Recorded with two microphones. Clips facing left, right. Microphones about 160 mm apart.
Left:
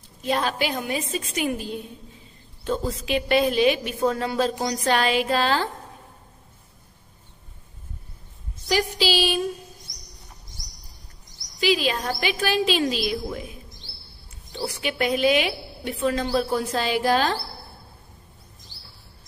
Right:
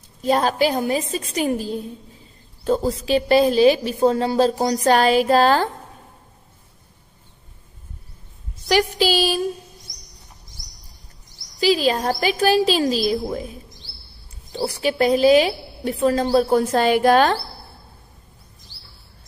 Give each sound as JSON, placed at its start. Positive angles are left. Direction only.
{"t": 0.2, "sound": "a woman's voice", "side_deg": -40}
{"t": 8.9, "sound": "a sound", "side_deg": -45}
{"t": 11.6, "sound": "a woman's voice", "side_deg": -35}